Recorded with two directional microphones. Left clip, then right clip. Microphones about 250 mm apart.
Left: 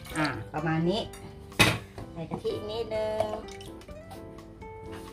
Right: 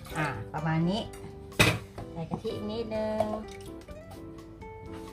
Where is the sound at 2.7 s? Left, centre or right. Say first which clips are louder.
Even; centre.